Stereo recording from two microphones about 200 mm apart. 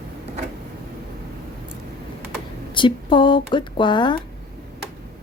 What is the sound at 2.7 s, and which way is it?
A woman's voice, 25° left (ahead or behind).